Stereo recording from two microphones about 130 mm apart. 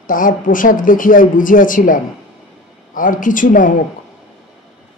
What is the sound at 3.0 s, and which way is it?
Speech, 90° left.